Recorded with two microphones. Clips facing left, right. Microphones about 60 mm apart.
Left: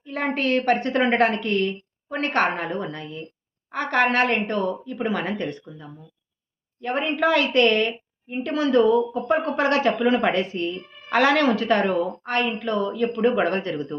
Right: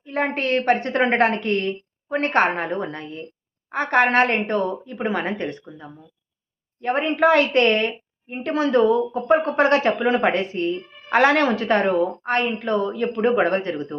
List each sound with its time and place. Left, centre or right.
0.0 s a woman's voice: right